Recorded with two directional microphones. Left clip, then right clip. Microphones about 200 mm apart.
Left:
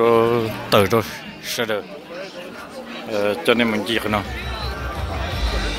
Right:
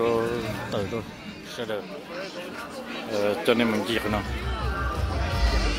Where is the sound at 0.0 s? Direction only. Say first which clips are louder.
Left 9 dB; 30° left (ahead or behind).